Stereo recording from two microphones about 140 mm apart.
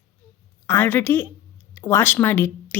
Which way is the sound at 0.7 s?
15° left (ahead or behind).